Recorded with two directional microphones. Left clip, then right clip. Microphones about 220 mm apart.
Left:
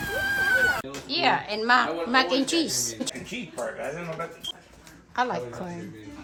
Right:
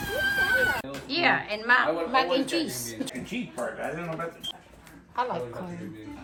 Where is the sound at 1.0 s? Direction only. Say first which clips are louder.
Left 1 dB; 15° left (ahead or behind).